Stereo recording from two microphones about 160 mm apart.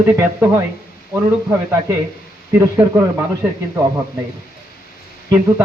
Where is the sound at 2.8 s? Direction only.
10° right (ahead or behind).